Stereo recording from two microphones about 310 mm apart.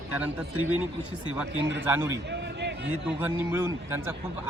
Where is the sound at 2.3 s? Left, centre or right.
Right.